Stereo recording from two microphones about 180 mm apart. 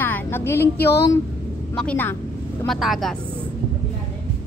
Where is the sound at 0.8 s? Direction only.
65° left (ahead or behind).